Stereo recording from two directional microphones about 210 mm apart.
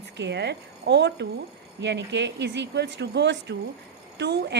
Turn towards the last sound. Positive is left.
turn(degrees=-55)  # may be behind; listen again after turning